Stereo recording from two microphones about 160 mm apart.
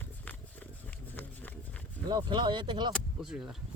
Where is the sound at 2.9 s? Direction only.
5° right (ahead or behind).